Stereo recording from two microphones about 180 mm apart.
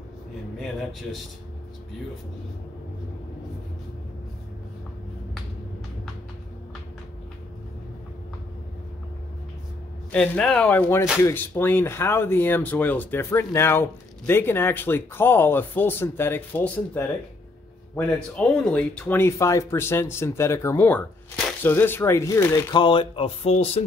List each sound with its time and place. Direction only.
10.1 s speech: 5° left (ahead or behind); by 23.8 s 35° left (ahead or behind)